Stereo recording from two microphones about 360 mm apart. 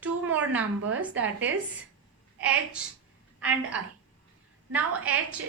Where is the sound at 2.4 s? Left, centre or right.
Centre.